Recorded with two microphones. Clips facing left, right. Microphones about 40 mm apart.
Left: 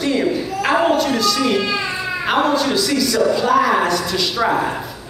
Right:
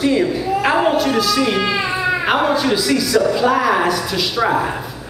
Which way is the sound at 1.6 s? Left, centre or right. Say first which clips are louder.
Right 2 dB; right.